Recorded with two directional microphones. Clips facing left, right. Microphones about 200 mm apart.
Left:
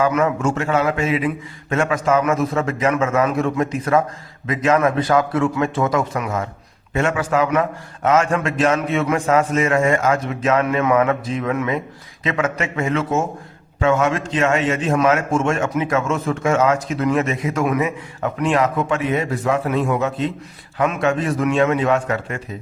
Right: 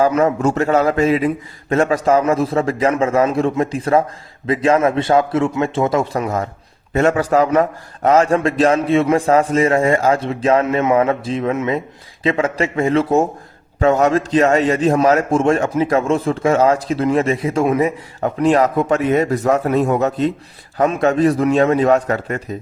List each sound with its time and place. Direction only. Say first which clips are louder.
0.0 s a man's voice: right 3 dB; 30° right (ahead or behind)